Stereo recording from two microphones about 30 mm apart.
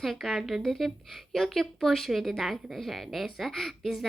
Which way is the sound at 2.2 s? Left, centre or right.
Centre.